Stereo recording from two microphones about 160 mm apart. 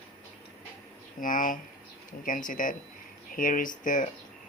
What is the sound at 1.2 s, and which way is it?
Speech, 55° left (ahead or behind).